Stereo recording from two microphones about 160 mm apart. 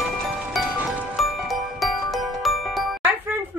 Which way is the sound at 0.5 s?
Centre (ahead or behind).